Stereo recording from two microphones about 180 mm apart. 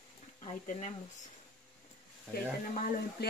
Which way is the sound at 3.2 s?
60° left (ahead or behind).